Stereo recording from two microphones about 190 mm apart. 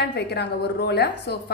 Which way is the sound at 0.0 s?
60° left (ahead or behind).